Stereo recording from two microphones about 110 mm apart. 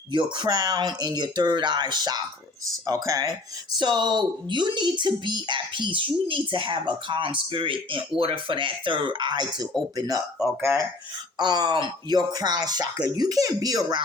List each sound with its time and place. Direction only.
0.1 s speech: 45° right (ahead or behind)
3.8 s speech: 45° right (ahead or behind)
10.6 s speech: 25° right (ahead or behind)
11.3 s speech: 40° right (ahead or behind)